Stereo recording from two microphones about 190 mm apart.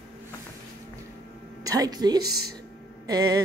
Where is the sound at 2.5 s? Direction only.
20° right (ahead or behind).